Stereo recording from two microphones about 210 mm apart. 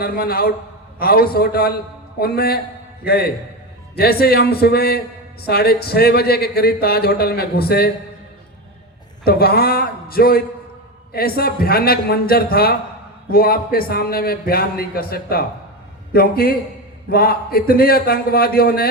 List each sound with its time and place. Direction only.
0.0 s a man's voice: 45° left (ahead or behind)
9.2 s a man's voice: 45° left (ahead or behind)